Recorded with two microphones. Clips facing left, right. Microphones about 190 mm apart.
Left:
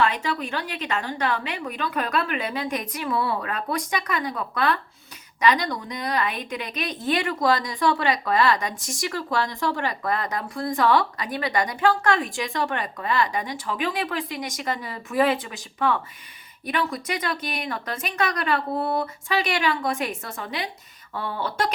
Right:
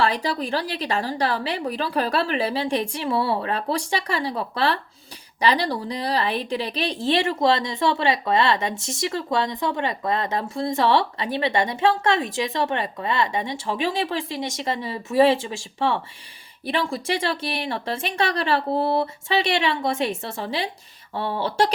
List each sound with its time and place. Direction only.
0.0 s a woman's voice: 35° right (ahead or behind)